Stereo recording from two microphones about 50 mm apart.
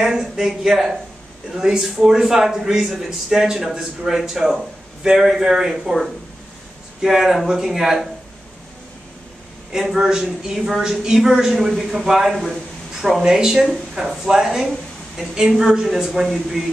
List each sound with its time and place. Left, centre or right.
0.1 s speech: centre
9.7 s speech: centre